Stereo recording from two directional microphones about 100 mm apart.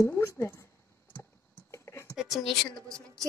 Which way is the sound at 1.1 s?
30° left (ahead or behind).